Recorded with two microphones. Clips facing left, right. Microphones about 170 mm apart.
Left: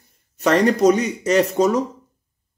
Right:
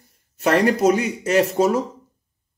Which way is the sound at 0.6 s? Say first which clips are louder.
Left 2 dB; 5° right (ahead or behind).